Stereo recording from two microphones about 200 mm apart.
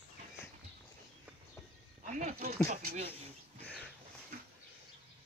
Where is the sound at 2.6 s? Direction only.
45° right (ahead or behind).